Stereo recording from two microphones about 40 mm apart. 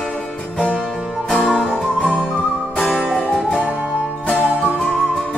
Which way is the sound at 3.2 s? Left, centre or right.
Left.